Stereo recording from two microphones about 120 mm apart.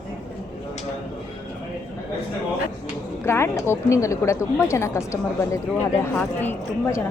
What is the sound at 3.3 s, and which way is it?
Speech, 20° left (ahead or behind).